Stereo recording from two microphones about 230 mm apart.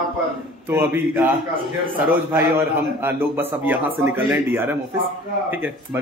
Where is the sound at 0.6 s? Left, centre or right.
Centre.